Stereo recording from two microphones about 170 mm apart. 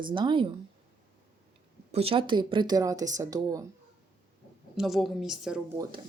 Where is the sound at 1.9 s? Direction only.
35° right (ahead or behind).